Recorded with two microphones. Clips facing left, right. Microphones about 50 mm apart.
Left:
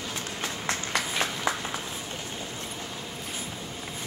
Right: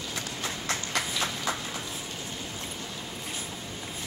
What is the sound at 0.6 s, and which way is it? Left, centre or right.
Train, left.